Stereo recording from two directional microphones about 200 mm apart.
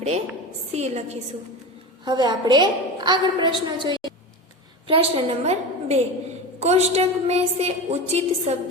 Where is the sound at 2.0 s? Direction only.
20° right (ahead or behind).